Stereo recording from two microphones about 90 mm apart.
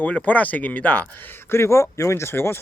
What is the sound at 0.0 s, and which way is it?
Speech, 15° left (ahead or behind).